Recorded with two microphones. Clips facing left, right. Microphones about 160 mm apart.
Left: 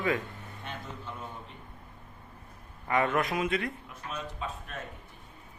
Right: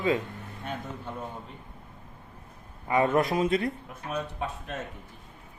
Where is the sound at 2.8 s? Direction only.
25° right (ahead or behind).